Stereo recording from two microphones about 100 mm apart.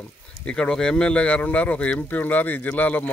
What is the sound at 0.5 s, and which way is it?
Speech, 10° left (ahead or behind).